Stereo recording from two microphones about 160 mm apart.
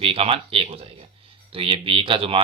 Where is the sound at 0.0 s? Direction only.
35° right (ahead or behind).